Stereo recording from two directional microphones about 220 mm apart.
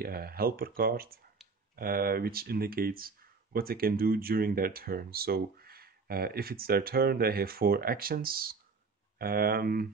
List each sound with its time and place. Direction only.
0.0 s speech: 45° right (ahead or behind)